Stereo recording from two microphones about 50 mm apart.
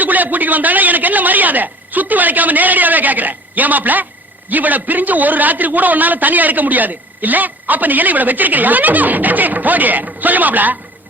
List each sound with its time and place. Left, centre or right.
0.0 s a man's voice: right